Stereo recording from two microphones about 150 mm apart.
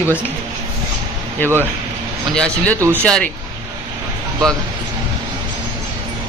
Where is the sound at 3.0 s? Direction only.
5° left (ahead or behind).